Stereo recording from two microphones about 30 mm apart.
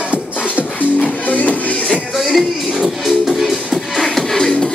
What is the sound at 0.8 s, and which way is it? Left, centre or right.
Music, left.